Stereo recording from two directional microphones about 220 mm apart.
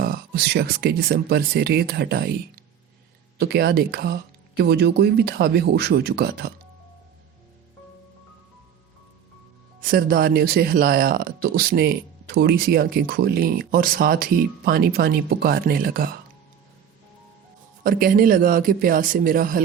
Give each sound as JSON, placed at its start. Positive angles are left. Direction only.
{"t": 0.0, "sound": "speech", "side_deg": -45}
{"t": 9.8, "sound": "speech", "side_deg": -40}
{"t": 17.8, "sound": "speech", "side_deg": -40}